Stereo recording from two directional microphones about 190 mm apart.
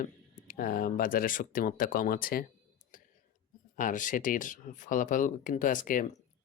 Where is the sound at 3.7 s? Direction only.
45° left (ahead or behind).